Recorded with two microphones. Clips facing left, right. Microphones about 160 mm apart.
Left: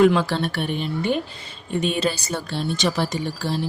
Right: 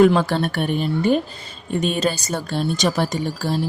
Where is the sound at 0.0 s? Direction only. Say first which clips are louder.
Right 2 dB; 45° right (ahead or behind).